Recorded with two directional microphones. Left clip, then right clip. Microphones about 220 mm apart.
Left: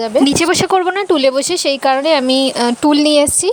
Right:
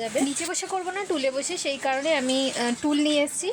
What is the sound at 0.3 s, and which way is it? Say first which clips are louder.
Speech: left 17 dB; 45° left (ahead or behind).